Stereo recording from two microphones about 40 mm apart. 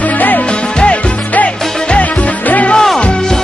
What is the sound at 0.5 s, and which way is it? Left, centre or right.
Music, left.